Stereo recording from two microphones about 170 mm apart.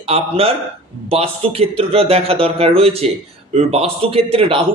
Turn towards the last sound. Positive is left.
turn(degrees=-35)  # may be behind; listen again after turning